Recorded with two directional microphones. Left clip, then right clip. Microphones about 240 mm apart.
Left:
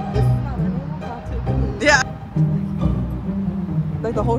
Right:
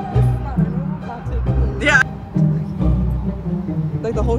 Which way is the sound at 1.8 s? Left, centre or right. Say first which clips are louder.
Right 1 dB; centre.